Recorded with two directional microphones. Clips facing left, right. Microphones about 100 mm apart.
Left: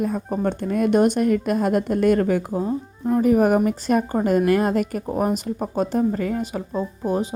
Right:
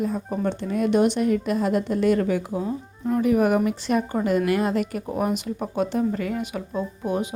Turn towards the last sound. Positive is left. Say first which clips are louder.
# left 2 dB
turn(degrees=35)  # may be behind; listen again after turning